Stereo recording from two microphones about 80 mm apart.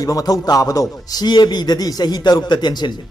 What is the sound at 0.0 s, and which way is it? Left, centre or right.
A man's voice, left.